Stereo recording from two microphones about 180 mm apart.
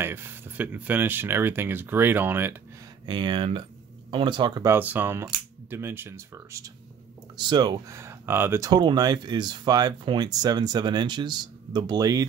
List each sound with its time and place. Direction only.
0.0 s speech: 10° right (ahead or behind)
3.1 s speech: 25° right (ahead or behind)
4.7 s speech: 10° right (ahead or behind)